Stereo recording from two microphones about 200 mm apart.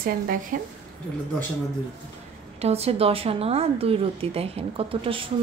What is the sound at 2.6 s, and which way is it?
A woman's voice, 30° right (ahead or behind).